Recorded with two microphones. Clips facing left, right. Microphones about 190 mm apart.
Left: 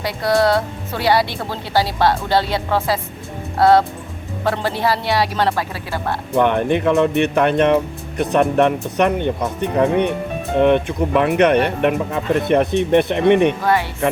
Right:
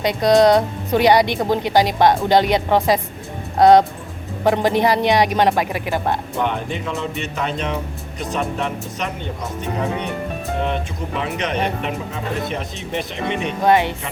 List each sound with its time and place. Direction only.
0.0 s speech: 20° right (ahead or behind)
6.4 s speech: 60° left (ahead or behind)
13.6 s speech: 20° right (ahead or behind)